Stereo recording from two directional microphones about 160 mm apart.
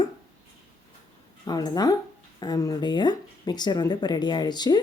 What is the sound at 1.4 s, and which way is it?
Speech, 25° left (ahead or behind).